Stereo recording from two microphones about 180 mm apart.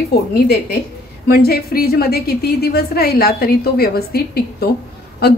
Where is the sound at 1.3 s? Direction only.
60° left (ahead or behind).